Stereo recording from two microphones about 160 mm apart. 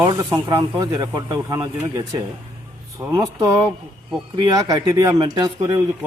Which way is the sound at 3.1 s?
15° right (ahead or behind).